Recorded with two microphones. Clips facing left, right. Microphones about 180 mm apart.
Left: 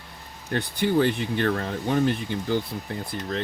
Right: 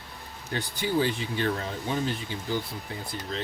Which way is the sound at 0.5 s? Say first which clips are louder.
Left 5 dB; 60° left (ahead or behind).